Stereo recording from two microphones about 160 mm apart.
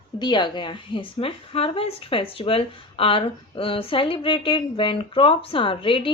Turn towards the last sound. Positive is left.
turn(degrees=35)  # may be behind; listen again after turning